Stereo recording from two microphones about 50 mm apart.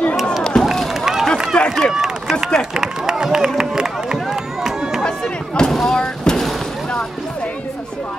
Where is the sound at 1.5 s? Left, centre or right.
Centre.